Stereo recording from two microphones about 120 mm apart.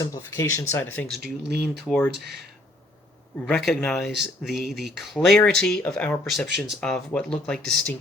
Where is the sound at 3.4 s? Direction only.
Centre (ahead or behind).